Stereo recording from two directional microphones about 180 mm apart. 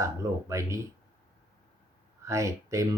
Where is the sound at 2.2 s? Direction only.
15° right (ahead or behind).